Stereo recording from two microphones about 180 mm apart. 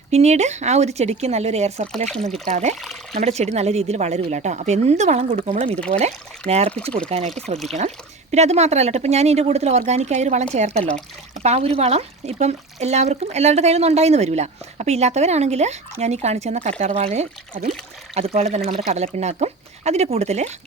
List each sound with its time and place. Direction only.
0.1 s speech: 40° right (ahead or behind)
2.0 s speech: centre (ahead or behind)
2.5 s speech: 40° right (ahead or behind)
2.8 s pour: centre (ahead or behind)
3.2 s speech: 40° right (ahead or behind)